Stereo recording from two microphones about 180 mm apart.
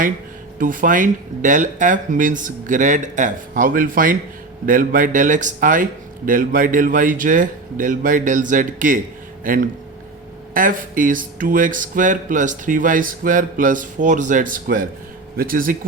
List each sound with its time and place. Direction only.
0.6 s speech: 50° right (ahead or behind)